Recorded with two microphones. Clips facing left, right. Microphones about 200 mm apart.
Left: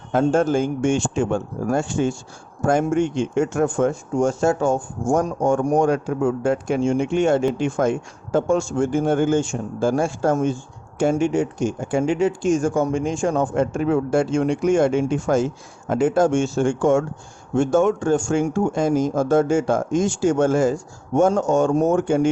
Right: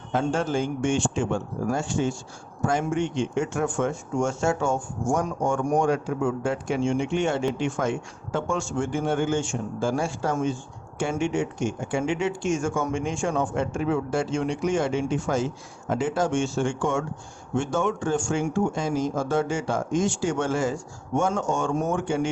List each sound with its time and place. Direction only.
0.1 s speech: 50° left (ahead or behind)